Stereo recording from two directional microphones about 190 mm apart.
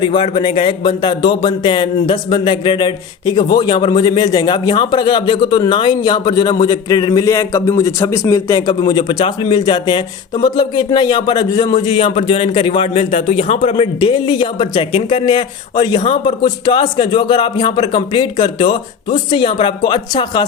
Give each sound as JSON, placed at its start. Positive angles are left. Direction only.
{"t": 0.0, "sound": "speech", "side_deg": 25}